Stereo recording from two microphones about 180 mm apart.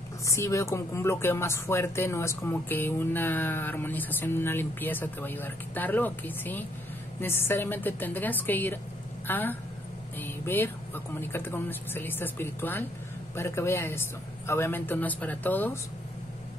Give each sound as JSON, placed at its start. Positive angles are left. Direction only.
{"t": 0.3, "sound": "speech", "side_deg": 15}